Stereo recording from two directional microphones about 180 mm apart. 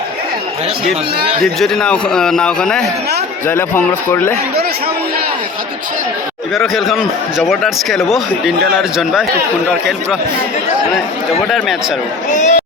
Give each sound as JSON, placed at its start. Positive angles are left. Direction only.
{"t": 1.5, "sound": "a man's voice", "side_deg": 0}
{"t": 6.5, "sound": "a man's voice", "side_deg": 0}
{"t": 12.3, "sound": "speech", "side_deg": 40}